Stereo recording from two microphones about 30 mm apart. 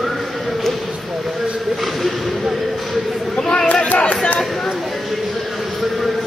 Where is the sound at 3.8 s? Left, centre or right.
Left.